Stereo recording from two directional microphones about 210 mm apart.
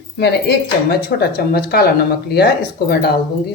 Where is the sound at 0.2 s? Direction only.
50° left (ahead or behind).